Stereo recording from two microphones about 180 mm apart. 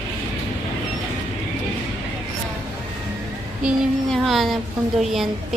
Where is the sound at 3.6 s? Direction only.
Centre (ahead or behind).